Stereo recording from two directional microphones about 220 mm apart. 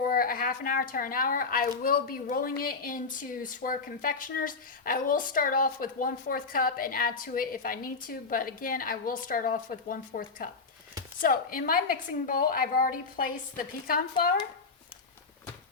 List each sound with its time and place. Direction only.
0.0 s speech: 40° left (ahead or behind)